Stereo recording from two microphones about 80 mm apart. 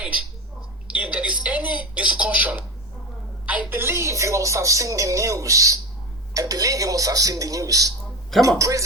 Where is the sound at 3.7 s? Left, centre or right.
Right.